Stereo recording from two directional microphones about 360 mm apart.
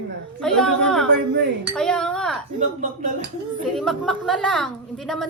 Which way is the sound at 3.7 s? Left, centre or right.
Centre.